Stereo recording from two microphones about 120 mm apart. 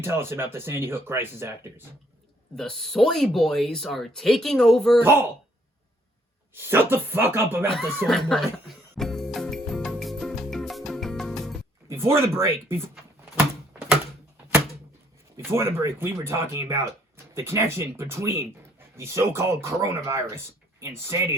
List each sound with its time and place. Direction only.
0.0 s speech: 20° right (ahead or behind)
2.6 s speech: 5° left (ahead or behind)
5.0 s speech: 20° right (ahead or behind)
6.5 s speech: 20° right (ahead or behind)
8.0 s speech: 5° left (ahead or behind)
9.0 s music: 5° left (ahead or behind)
11.9 s speech: 20° right (ahead or behind)
15.5 s speech: 20° right (ahead or behind)